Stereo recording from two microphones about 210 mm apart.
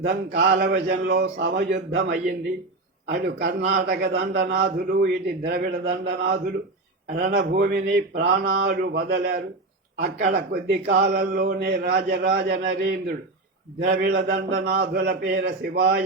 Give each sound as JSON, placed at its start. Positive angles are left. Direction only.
{"t": 0.3, "sound": "a man's voice", "side_deg": -50}
{"t": 2.0, "sound": "a man's voice", "side_deg": -45}